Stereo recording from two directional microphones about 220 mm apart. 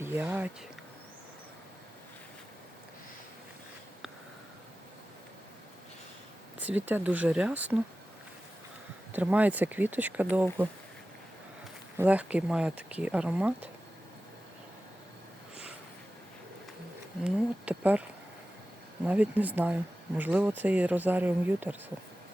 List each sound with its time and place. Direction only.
0.0 s speech: 10° right (ahead or behind)
6.6 s speech: 5° right (ahead or behind)
9.1 s speech: 5° right (ahead or behind)
11.9 s speech: 5° right (ahead or behind)
17.2 s speech: 5° right (ahead or behind)
19.0 s speech: 5° right (ahead or behind)